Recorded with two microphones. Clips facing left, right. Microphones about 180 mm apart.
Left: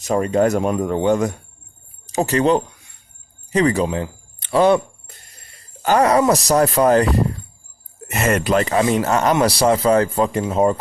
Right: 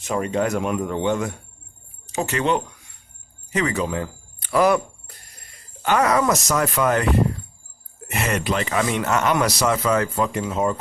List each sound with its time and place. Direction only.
0.0 s speech: 40° left (ahead or behind)
3.8 s cricket: 25° left (ahead or behind)
5.8 s speech: 35° left (ahead or behind)
8.1 s speech: 45° left (ahead or behind); by 10.8 s 30° left (ahead or behind)